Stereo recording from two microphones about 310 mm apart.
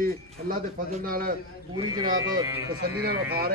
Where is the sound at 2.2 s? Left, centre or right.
Centre.